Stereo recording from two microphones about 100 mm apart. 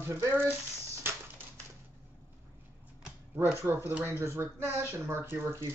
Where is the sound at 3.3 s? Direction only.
25° right (ahead or behind).